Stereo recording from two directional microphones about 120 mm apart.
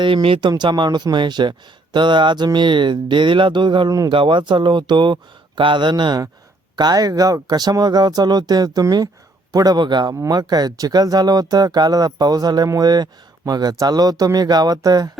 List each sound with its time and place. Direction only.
0.0 s speech: 50° right (ahead or behind); by 4.1 s 30° right (ahead or behind)
4.1 s speech: 45° right (ahead or behind)